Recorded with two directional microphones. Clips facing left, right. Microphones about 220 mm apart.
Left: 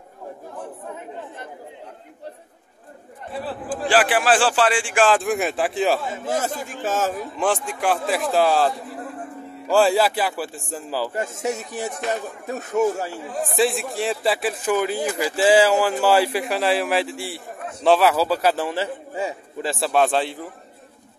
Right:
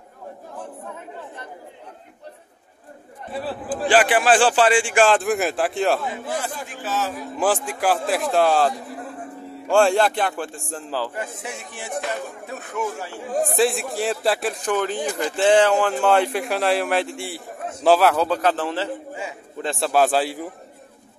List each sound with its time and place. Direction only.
3.8 s a man's voice: centre (ahead or behind)
6.0 s speech: 45° left (ahead or behind)
7.3 s a man's voice: 5° right (ahead or behind)
11.1 s speech: 45° left (ahead or behind)
13.3 s a man's voice: 40° right (ahead or behind)
13.6 s a man's voice: centre (ahead or behind)